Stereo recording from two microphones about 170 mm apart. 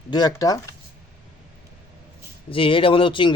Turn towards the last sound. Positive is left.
turn(degrees=30)  # may be behind; listen again after turning